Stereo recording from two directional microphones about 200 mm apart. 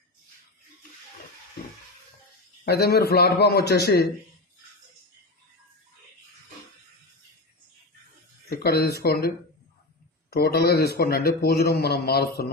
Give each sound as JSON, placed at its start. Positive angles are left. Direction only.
{"t": 2.6, "sound": "a man's voice", "side_deg": 50}
{"t": 8.4, "sound": "a man's voice", "side_deg": 50}